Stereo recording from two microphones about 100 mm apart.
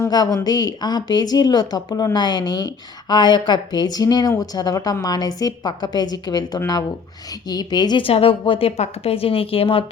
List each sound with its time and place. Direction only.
0.1 s speech: 45° left (ahead or behind)
8.0 s a woman's voice: 65° left (ahead or behind)